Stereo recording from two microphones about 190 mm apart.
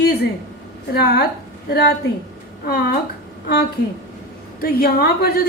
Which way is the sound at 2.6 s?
55° left (ahead or behind).